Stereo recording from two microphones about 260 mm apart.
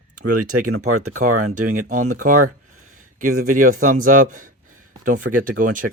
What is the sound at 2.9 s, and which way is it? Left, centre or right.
Speech, right.